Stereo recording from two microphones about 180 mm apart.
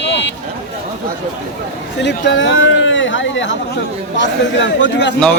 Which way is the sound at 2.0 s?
75° left (ahead or behind).